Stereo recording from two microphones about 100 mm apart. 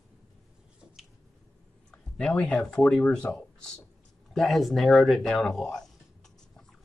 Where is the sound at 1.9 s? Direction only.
10° left (ahead or behind).